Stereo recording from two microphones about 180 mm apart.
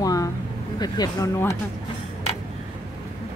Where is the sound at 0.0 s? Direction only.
20° left (ahead or behind).